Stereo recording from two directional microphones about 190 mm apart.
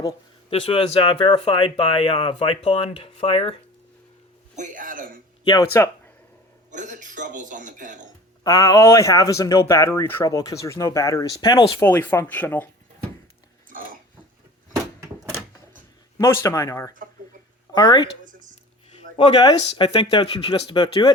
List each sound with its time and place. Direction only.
0.6 s speech: 30° left (ahead or behind)
4.5 s speech: 45° right (ahead or behind)
5.5 s speech: 15° left (ahead or behind)
6.7 s speech: 40° right (ahead or behind)
8.4 s speech: 20° left (ahead or behind)
11.8 s speech: 10° left (ahead or behind)
13.7 s a sound: 45° right (ahead or behind)
16.1 s speech: 15° left (ahead or behind)
19.1 s speech: 25° left (ahead or behind)